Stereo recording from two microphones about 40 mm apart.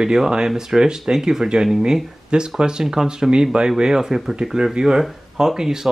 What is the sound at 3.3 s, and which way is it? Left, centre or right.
Speech, right.